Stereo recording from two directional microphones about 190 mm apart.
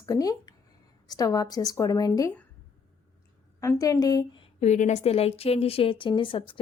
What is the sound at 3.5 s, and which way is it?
A woman's voice, 15° left (ahead or behind).